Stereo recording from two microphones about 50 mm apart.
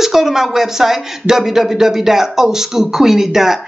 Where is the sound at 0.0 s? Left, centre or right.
Centre.